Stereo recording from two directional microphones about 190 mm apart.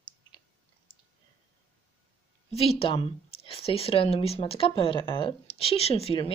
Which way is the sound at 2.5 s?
30° left (ahead or behind).